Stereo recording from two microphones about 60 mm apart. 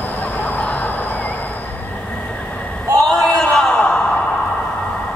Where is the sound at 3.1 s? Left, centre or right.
Centre.